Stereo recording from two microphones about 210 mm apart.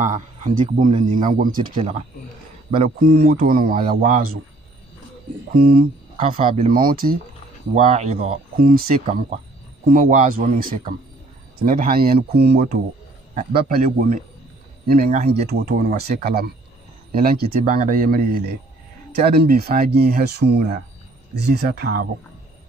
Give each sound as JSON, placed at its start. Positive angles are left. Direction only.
{"t": 0.0, "sound": "a man's voice", "side_deg": -35}
{"t": 1.8, "sound": "speech", "side_deg": -30}
{"t": 3.4, "sound": "speech", "side_deg": -45}
{"t": 5.5, "sound": "speech", "side_deg": -45}
{"t": 6.1, "sound": "speech", "side_deg": -25}
{"t": 6.7, "sound": "speech", "side_deg": -45}
{"t": 7.7, "sound": "a man's voice", "side_deg": -30}
{"t": 8.5, "sound": "a man's voice", "side_deg": -45}